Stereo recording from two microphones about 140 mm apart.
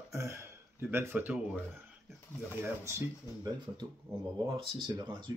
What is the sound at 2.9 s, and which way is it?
Speech, 20° right (ahead or behind).